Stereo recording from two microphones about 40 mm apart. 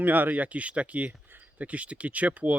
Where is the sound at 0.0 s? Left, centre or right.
Right.